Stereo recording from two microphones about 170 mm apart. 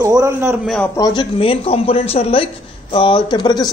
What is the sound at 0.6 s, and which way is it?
Speech, centre (ahead or behind).